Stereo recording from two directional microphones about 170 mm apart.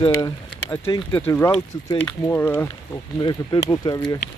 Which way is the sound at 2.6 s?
25° left (ahead or behind).